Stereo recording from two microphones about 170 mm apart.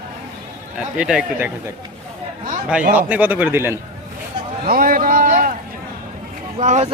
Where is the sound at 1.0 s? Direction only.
5° right (ahead or behind).